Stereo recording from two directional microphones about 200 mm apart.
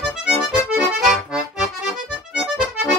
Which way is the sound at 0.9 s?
5° right (ahead or behind).